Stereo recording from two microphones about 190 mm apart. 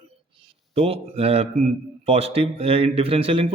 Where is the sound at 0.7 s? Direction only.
30° right (ahead or behind).